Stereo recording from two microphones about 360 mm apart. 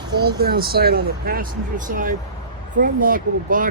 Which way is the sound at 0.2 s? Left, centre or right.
Right.